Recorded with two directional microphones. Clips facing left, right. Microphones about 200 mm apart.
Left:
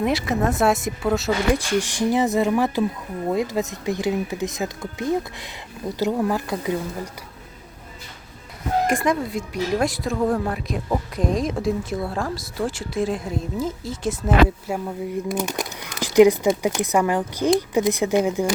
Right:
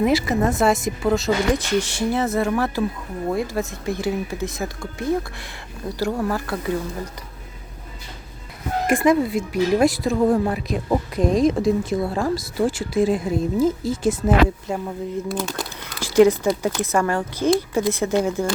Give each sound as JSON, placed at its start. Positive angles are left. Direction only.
{"t": 0.0, "sound": "speech", "side_deg": 0}
{"t": 8.9, "sound": "speech", "side_deg": -5}